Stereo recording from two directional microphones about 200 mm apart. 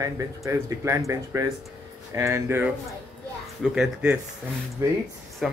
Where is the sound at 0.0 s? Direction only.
15° right (ahead or behind).